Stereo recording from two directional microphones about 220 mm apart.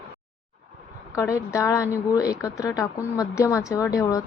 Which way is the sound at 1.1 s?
15° left (ahead or behind).